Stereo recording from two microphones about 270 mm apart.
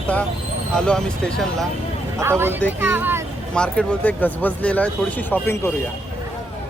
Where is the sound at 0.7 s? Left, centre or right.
Centre.